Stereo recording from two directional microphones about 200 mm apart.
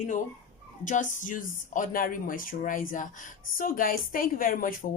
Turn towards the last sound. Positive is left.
turn(degrees=45)  # may be behind; listen again after turning